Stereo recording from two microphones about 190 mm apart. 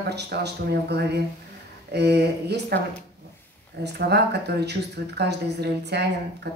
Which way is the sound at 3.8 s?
60° right (ahead or behind).